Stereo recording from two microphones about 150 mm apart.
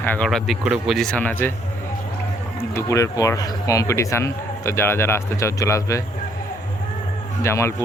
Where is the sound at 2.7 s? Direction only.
20° left (ahead or behind).